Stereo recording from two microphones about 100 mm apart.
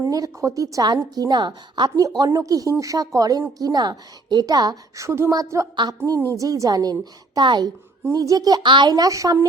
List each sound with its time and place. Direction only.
0.0 s a woman's voice: 35° right (ahead or behind)
2.0 s a woman's voice: 40° right (ahead or behind)
8.1 s a woman's voice: 35° right (ahead or behind)